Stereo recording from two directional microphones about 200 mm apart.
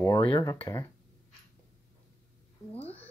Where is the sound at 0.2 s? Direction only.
20° left (ahead or behind).